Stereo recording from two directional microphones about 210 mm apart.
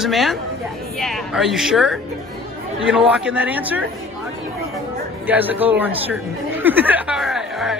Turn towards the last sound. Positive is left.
turn(degrees=0)  # may be behind; listen again after turning